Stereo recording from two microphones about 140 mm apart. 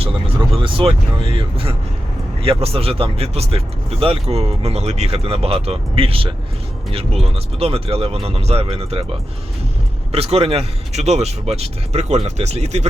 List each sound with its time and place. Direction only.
0.0 s speech: 40° right (ahead or behind)
10.1 s speech: 45° right (ahead or behind)